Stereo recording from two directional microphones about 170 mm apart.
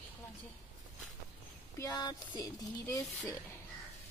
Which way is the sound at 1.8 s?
20° left (ahead or behind).